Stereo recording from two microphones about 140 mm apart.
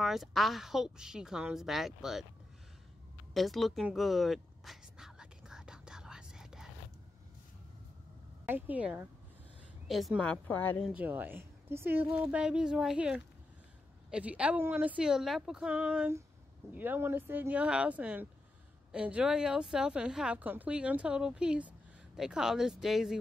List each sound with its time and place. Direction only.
0.0 s a woman's voice: centre (ahead or behind)
3.3 s a sound: centre (ahead or behind)
8.5 s a woman's voice: 15° right (ahead or behind)
9.8 s a woman's voice: centre (ahead or behind)
10.8 s a woman's voice: 5° right (ahead or behind)